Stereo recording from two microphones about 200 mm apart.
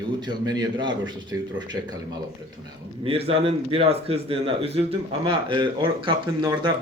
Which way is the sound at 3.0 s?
30° right (ahead or behind).